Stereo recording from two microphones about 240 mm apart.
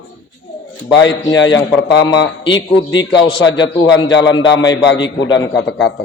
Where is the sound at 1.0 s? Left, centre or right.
Left.